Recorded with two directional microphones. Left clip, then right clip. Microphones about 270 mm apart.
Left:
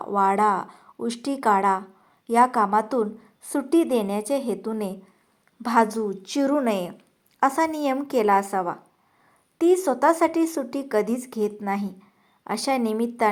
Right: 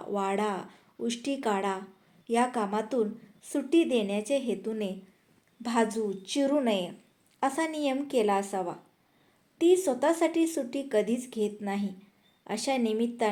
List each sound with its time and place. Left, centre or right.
0.0 s a woman's voice: centre